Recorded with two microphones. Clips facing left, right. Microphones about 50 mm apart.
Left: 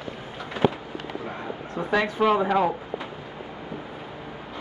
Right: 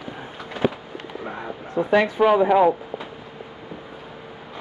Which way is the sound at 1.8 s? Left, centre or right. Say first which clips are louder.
Right 5 dB; centre.